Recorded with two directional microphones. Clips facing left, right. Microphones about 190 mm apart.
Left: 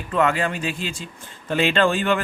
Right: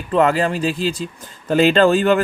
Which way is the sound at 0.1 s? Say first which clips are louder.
Right 5 dB; 35° right (ahead or behind).